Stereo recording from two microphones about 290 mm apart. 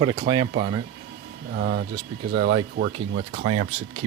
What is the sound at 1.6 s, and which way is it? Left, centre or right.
Speech, right.